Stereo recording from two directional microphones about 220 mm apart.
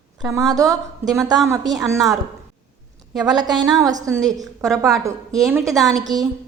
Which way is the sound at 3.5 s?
Centre (ahead or behind).